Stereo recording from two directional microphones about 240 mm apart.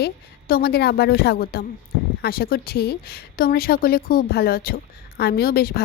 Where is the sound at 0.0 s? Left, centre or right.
Left.